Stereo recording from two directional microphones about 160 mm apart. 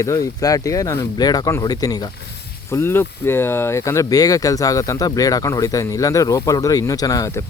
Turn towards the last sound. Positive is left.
turn(degrees=20)  # may be behind; listen again after turning